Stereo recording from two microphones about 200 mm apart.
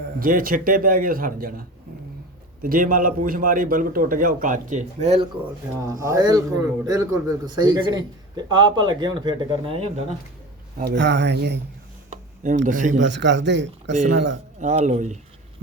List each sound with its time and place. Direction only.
0.2 s a man's voice: 45° right (ahead or behind)
2.6 s a man's voice: 45° right (ahead or behind)
5.9 s a man's voice: 15° right (ahead or behind)
10.8 s speech: 60° right (ahead or behind)
12.1 s a sound: 40° right (ahead or behind)
12.6 s speech: 40° right (ahead or behind)
13.0 s speech: 65° right (ahead or behind)
14.6 s speech: 35° right (ahead or behind)